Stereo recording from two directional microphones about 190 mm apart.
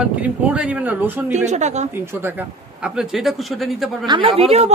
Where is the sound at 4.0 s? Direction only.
25° right (ahead or behind).